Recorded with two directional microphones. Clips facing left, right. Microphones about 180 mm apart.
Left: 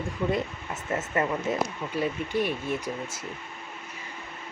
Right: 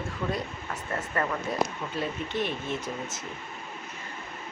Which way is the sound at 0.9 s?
20° left (ahead or behind).